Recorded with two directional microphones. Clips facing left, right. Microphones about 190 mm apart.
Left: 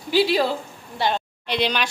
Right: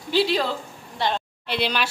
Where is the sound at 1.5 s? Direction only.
5° right (ahead or behind).